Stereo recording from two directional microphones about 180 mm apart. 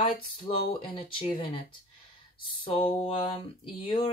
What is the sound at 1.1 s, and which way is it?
Speech, 30° left (ahead or behind).